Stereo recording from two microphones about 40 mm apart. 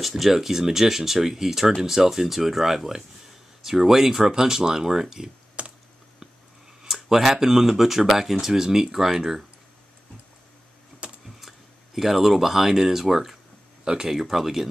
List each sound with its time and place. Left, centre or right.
0.0 s speech: centre
5.6 s typing: right
6.9 s speech: centre
11.2 s speech: centre